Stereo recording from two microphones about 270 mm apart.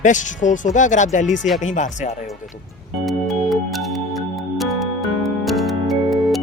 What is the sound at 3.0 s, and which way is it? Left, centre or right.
Music, centre.